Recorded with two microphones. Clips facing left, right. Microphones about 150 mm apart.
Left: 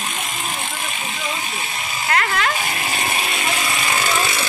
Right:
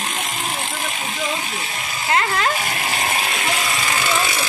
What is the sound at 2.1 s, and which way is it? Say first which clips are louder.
Speech: right 1 dB; 30° right (ahead or behind).